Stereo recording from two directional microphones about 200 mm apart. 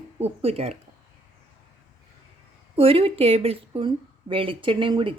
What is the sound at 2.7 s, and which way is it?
Speech, 30° right (ahead or behind).